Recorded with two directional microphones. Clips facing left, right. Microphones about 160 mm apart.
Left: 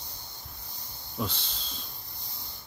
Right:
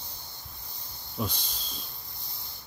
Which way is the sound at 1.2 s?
15° right (ahead or behind).